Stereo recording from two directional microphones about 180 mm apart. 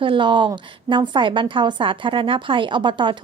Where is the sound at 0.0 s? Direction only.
25° right (ahead or behind).